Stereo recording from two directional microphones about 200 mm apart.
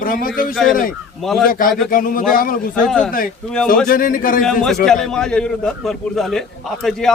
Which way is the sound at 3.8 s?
45° left (ahead or behind).